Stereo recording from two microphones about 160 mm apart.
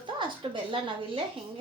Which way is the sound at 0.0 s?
30° right (ahead or behind).